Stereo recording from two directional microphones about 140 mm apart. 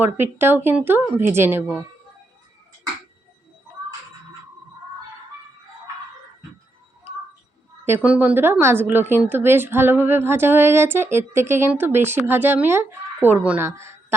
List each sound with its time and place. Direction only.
0.0 s a woman's voice: 15° right (ahead or behind)
7.9 s a woman's voice: 10° right (ahead or behind)